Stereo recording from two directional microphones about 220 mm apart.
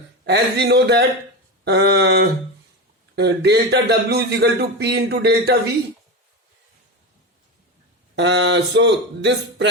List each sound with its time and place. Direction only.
0.3 s speech: 50° right (ahead or behind)
8.1 s speech: 50° right (ahead or behind)